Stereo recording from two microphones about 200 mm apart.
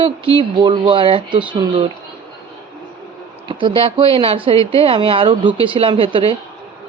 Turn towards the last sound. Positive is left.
turn(degrees=-25)  # may be behind; listen again after turning